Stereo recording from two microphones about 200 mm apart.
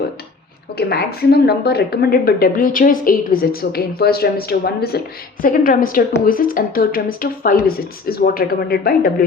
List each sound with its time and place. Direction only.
0.8 s a woman's voice: 50° left (ahead or behind)